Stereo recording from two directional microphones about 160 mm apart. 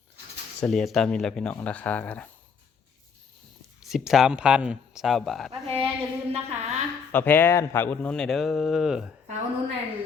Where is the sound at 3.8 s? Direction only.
Centre (ahead or behind).